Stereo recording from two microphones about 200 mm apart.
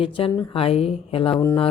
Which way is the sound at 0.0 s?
25° left (ahead or behind).